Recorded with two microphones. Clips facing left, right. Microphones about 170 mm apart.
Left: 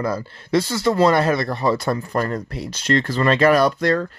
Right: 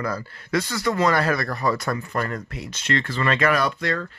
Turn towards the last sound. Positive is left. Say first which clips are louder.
# left 7 dB
turn(degrees=40)  # may be behind; listen again after turning